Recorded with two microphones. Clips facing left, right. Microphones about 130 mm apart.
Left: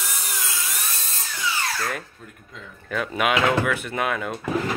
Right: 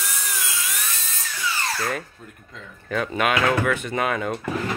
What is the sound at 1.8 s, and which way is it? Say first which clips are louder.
Speech: right 2 dB; centre (ahead or behind).